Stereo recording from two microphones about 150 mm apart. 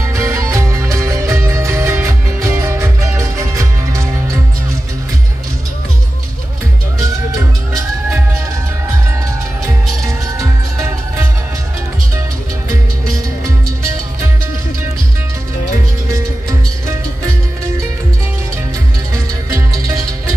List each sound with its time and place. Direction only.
0.0 s music: 20° right (ahead or behind)
10.4 s music: 20° right (ahead or behind)
19.5 s music: 20° right (ahead or behind)